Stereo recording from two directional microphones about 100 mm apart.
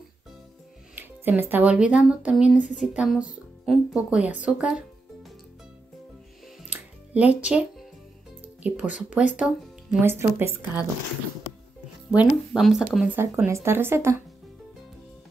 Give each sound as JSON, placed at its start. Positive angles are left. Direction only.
{"t": 0.9, "sound": "speech", "side_deg": -20}
{"t": 6.7, "sound": "music", "side_deg": -15}
{"t": 8.6, "sound": "speech", "side_deg": -15}
{"t": 10.0, "sound": "speech", "side_deg": -25}
{"t": 12.1, "sound": "speech", "side_deg": -10}
{"t": 13.1, "sound": "speech", "side_deg": -25}